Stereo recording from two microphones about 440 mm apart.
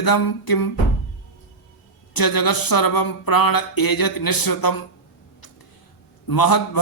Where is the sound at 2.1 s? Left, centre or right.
Left.